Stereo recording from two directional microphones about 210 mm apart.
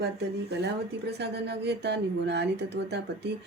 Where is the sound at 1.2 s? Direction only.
55° right (ahead or behind).